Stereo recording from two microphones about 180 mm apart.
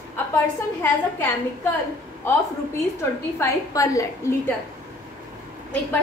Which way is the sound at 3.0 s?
15° left (ahead or behind).